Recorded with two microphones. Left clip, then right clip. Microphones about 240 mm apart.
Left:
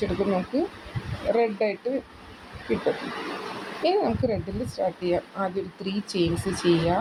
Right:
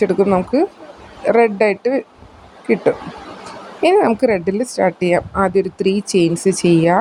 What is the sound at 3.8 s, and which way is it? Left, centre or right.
A woman's voice, right.